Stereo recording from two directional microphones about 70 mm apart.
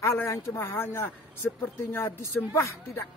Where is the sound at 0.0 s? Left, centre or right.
Left.